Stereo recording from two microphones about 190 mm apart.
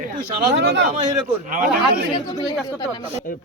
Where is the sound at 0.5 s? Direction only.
65° right (ahead or behind).